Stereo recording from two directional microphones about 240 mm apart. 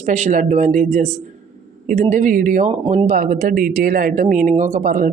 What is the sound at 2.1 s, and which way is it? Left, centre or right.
Speech, right.